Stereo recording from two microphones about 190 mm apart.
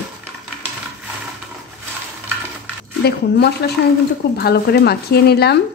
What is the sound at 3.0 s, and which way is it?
A woman's voice, 60° left (ahead or behind).